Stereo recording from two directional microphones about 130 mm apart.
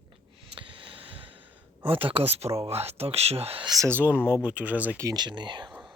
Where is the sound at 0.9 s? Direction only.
45° right (ahead or behind).